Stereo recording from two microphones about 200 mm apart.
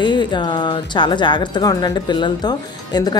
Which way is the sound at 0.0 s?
20° left (ahead or behind).